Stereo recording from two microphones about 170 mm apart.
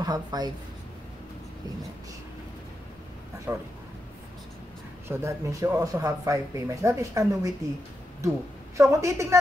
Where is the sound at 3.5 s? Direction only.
10° right (ahead or behind).